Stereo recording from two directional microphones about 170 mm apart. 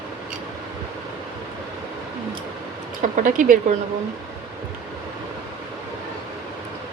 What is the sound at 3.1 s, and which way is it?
Speech, 50° right (ahead or behind).